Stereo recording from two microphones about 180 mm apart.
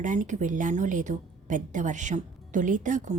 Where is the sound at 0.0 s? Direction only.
45° right (ahead or behind).